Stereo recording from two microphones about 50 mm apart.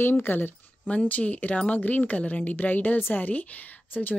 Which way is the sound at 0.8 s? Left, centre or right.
Left.